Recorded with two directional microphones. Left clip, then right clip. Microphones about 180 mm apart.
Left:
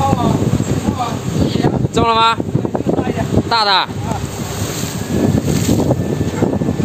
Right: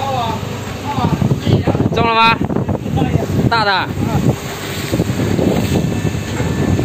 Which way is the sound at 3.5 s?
10° left (ahead or behind).